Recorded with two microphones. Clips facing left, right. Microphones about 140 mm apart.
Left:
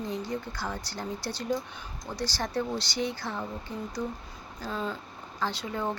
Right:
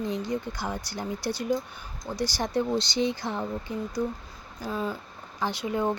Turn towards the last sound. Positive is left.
turn(degrees=-15)  # may be behind; listen again after turning